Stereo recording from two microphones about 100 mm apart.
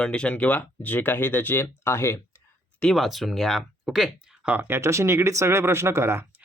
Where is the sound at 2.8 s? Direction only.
Centre (ahead or behind).